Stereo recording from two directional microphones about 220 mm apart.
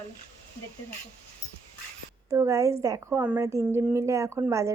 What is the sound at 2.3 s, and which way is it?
A woman's voice, 15° right (ahead or behind).